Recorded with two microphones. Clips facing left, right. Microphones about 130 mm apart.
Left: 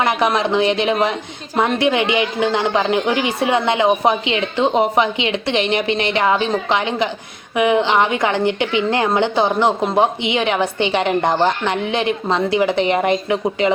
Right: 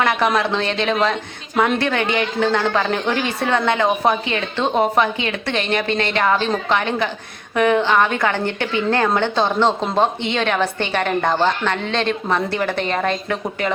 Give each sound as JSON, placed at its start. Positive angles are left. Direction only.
{"t": 0.0, "sound": "a woman's voice", "side_deg": 15}